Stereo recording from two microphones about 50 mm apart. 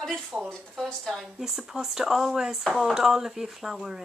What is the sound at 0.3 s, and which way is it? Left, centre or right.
Speech, centre.